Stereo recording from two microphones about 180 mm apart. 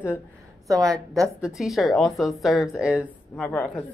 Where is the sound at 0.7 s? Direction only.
20° right (ahead or behind).